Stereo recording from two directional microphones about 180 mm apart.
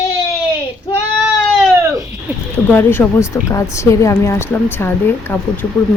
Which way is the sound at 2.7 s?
10° left (ahead or behind).